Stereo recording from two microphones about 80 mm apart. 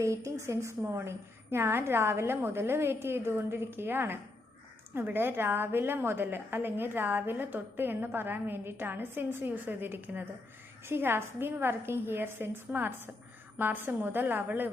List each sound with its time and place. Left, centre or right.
0.0 s a woman's voice: right